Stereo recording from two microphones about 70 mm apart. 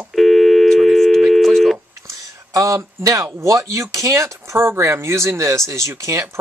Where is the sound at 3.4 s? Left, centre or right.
Right.